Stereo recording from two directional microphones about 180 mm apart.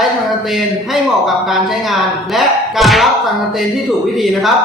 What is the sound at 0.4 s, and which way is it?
Speech, centre (ahead or behind).